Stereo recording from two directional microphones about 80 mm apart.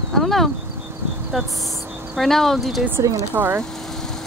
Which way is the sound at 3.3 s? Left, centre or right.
Right.